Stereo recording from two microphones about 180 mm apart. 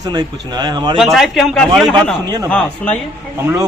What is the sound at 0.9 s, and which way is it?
A man's voice, centre (ahead or behind).